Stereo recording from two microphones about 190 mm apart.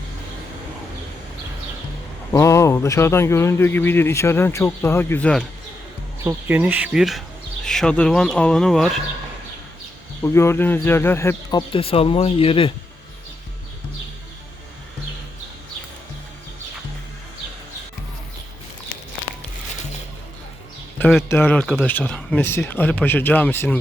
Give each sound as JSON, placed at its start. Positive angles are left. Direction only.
{"t": 2.3, "sound": "speech", "side_deg": 15}
{"t": 6.2, "sound": "speech", "side_deg": -10}
{"t": 10.2, "sound": "speech", "side_deg": 15}
{"t": 11.7, "sound": "speech", "side_deg": 30}
{"t": 21.0, "sound": "speech", "side_deg": 5}